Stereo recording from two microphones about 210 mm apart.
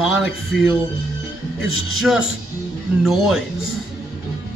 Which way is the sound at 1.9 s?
Centre (ahead or behind).